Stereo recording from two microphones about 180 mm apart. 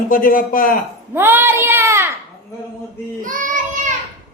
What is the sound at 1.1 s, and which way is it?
Speech, 15° right (ahead or behind).